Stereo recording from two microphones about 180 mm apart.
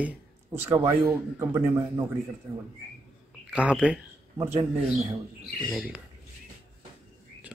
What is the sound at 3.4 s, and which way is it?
Speech, 5° right (ahead or behind).